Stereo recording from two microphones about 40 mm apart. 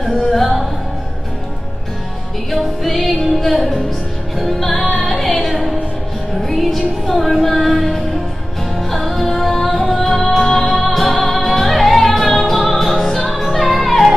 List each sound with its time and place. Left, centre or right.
0.0 s music: centre
2.5 s music: centre